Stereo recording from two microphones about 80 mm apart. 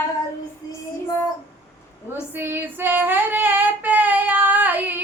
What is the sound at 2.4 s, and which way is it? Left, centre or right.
Child singing, right.